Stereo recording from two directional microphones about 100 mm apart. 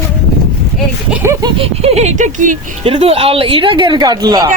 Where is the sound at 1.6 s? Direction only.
85° right.